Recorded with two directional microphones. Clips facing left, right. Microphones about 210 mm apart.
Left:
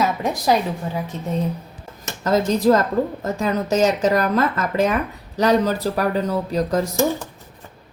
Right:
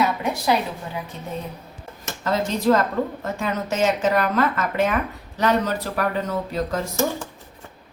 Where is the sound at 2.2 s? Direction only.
40° left (ahead or behind).